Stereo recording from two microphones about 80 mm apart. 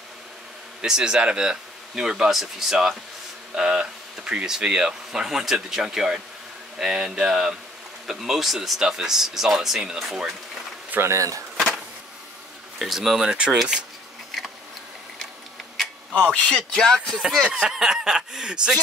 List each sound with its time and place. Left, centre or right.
0.8 s speech: centre
10.9 s speech: right
12.7 s speech: centre
16.3 s speech: centre
17.4 s speech: centre